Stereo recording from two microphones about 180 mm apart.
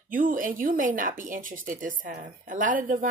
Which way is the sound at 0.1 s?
50° right (ahead or behind).